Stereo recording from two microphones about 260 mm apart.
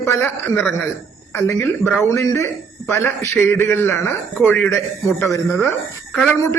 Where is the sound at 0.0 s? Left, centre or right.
Centre.